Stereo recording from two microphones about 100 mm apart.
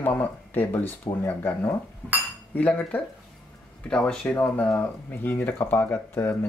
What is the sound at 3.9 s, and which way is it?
Speech, 10° left (ahead or behind).